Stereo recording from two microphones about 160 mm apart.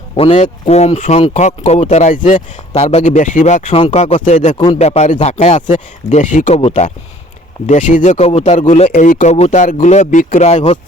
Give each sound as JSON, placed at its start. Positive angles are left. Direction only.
{"t": 0.2, "sound": "speech", "side_deg": 40}
{"t": 4.5, "sound": "speech", "side_deg": 25}
{"t": 4.8, "sound": "speech", "side_deg": 45}
{"t": 7.7, "sound": "speech", "side_deg": 50}